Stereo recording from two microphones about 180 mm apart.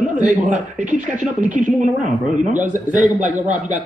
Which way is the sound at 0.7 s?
45° right (ahead or behind).